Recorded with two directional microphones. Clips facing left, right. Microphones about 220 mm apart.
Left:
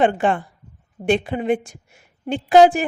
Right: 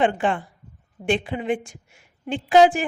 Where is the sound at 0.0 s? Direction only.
45° left (ahead or behind).